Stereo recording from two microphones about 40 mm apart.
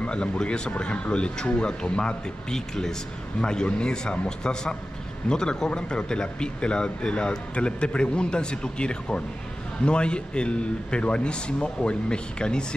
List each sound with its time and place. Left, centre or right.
0.0 s a man's voice: left